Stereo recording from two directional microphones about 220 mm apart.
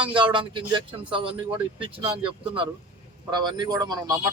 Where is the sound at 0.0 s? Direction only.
20° right (ahead or behind).